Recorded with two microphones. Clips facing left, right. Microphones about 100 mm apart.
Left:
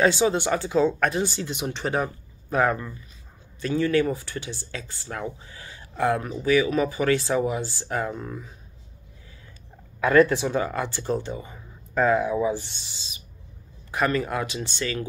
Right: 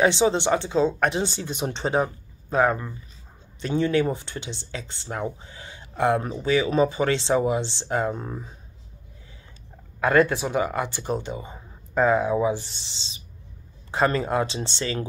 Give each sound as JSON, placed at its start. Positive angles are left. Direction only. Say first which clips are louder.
{"t": 0.0, "sound": "speech", "louder": "right 1 dB", "side_deg": -25}
{"t": 10.3, "sound": "speech", "louder": "even", "side_deg": -15}